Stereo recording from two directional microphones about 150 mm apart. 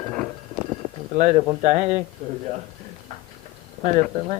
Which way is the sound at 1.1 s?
65° right (ahead or behind).